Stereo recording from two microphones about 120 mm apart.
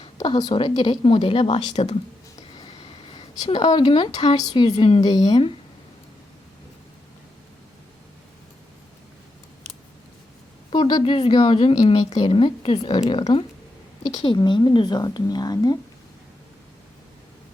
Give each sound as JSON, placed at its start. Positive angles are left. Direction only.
{"t": 0.0, "sound": "speech", "side_deg": 40}
{"t": 2.6, "sound": "a sound", "side_deg": 45}
{"t": 3.4, "sound": "speech", "side_deg": 40}
{"t": 10.7, "sound": "speech", "side_deg": 40}
{"t": 12.2, "sound": "speech", "side_deg": 50}